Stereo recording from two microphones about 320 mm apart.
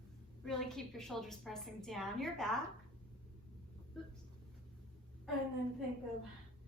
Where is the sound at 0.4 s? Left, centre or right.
Centre.